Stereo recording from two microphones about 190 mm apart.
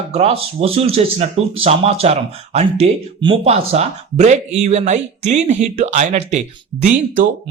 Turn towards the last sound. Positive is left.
turn(degrees=-40)  # may be behind; listen again after turning